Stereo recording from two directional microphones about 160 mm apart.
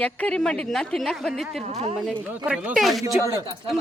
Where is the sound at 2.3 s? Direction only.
10° right (ahead or behind).